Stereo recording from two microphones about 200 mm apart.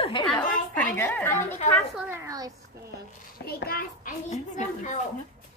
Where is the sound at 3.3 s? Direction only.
50° left (ahead or behind).